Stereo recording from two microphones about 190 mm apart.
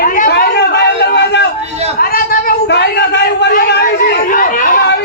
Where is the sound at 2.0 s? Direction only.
50° left (ahead or behind).